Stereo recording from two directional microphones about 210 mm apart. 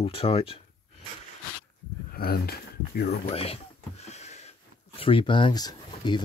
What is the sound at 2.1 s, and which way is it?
Speech, 45° left (ahead or behind).